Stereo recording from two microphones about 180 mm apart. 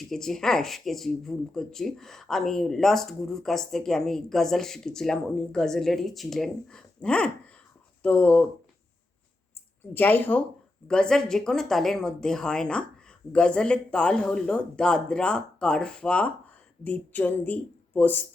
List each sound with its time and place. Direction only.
0.1 s speech: centre (ahead or behind)
9.9 s speech: 10° left (ahead or behind)